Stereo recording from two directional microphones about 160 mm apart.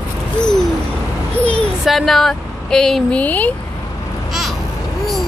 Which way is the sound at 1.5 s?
5° left (ahead or behind).